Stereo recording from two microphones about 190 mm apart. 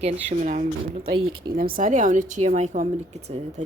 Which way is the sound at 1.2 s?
90° right.